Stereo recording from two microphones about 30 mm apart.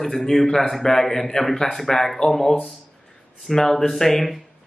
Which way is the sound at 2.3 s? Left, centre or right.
Centre.